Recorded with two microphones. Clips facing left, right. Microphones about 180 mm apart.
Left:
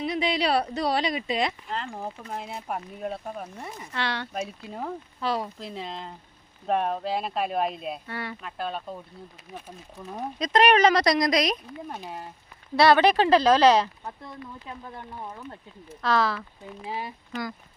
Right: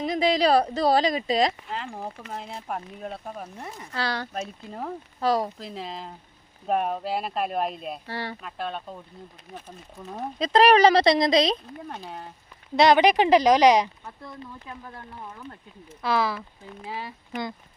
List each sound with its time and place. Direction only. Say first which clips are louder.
0.0 s speech: right 4 dB; 40° right (ahead or behind)
1.7 s speech: left 1 dB; 5° right (ahead or behind)
3.9 s speech: right 1 dB; 35° right (ahead or behind)
4.4 s speech: even; centre (ahead or behind)
5.2 s speech: right 5 dB; 40° right (ahead or behind)
5.5 s speech: even; centre (ahead or behind)
8.0 s speech: right 2 dB; 30° right (ahead or behind)
8.4 s speech: even; centre (ahead or behind)
10.3 s speech: right 3 dB; 30° right (ahead or behind)
12.7 s speech: right 1 dB; 20° right (ahead or behind)
14.9 s speech: left 2 dB; 20° left (ahead or behind)
16.0 s speech: left 1 dB; 10° right (ahead or behind)
16.9 s speech: left 2 dB; 15° left (ahead or behind)